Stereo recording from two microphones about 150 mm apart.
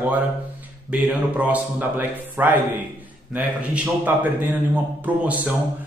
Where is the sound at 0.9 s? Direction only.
10° right (ahead or behind).